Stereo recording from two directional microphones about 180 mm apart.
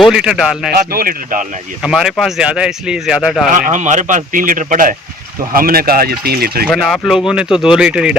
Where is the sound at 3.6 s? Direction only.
45° right (ahead or behind).